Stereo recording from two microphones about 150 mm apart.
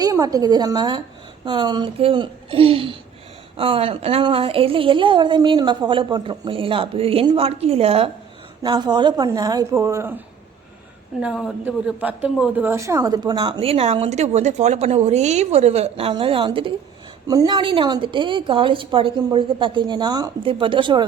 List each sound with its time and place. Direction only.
0.0 s a woman's voice: 20° right (ahead or behind); by 8.1 s 40° right (ahead or behind)
8.6 s a woman's voice: 30° right (ahead or behind)
11.2 s speech: 5° right (ahead or behind); by 21.1 s 30° right (ahead or behind)